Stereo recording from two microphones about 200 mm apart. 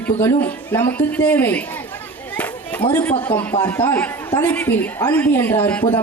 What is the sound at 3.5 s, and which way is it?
A man's voice, 20° left (ahead or behind).